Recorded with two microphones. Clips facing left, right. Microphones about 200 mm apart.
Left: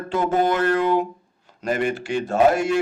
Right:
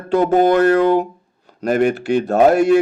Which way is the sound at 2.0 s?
65° right (ahead or behind).